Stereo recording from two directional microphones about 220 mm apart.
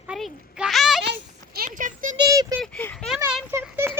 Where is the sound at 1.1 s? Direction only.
45° right (ahead or behind).